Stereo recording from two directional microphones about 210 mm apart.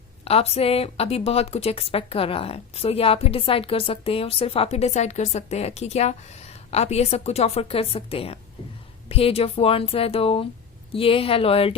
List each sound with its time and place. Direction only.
0.3 s speech: 30° left (ahead or behind)